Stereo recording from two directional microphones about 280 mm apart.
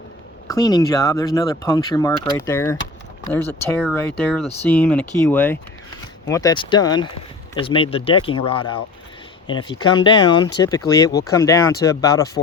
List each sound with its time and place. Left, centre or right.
0.4 s speech: centre